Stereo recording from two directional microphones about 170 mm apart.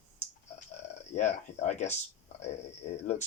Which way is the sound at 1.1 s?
45° left (ahead or behind).